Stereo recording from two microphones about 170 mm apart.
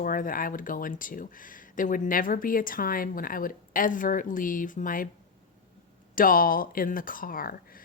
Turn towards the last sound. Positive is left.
turn(degrees=55)  # may be behind; listen again after turning